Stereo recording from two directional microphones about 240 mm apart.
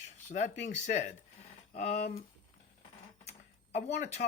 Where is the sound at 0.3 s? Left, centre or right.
Left.